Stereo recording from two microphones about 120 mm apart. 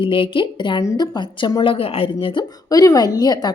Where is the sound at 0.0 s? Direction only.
45° left (ahead or behind).